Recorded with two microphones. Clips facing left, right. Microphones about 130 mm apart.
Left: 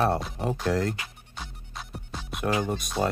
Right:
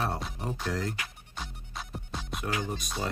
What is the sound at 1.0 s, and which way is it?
Music, centre (ahead or behind).